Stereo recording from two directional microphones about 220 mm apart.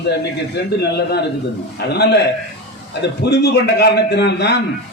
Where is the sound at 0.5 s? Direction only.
50° left (ahead or behind).